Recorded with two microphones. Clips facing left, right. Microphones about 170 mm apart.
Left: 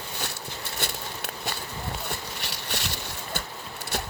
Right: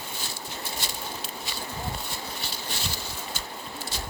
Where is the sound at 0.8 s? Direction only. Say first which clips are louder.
Left 1 dB; 60° left (ahead or behind).